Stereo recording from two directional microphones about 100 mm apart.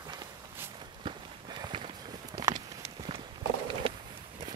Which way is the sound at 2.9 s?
65° right (ahead or behind).